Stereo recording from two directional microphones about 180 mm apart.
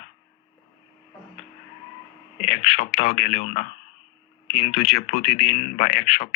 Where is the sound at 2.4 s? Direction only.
40° left (ahead or behind).